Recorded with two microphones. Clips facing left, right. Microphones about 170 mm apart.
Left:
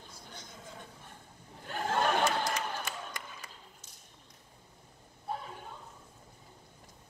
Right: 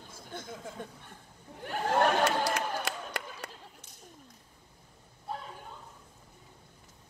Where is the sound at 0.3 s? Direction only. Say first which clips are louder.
Right 10 dB; 55° right (ahead or behind).